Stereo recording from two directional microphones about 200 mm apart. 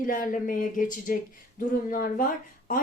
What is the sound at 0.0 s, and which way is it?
Speech, 40° left (ahead or behind).